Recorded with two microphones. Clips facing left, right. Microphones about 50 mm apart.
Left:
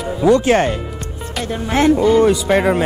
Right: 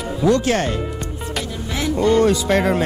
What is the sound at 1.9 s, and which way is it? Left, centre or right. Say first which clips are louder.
Speech: right 2 dB; centre.